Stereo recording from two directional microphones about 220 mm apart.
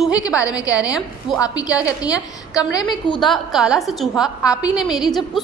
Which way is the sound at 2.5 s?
20° left (ahead or behind).